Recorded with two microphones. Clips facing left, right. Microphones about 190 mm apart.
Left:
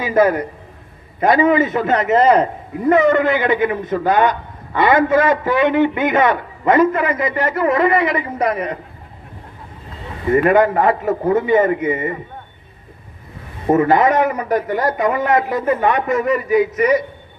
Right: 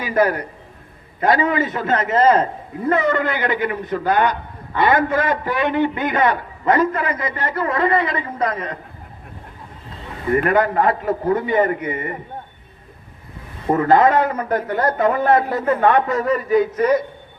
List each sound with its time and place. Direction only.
0.0 s a man's voice: 20° left (ahead or behind)
10.3 s a man's voice: 20° left (ahead or behind)
13.7 s a man's voice: 20° left (ahead or behind)